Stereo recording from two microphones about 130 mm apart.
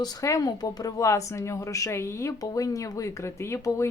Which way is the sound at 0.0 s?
30° left (ahead or behind).